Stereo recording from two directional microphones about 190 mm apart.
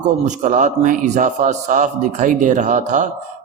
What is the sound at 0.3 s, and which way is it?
Speech, 40° right (ahead or behind).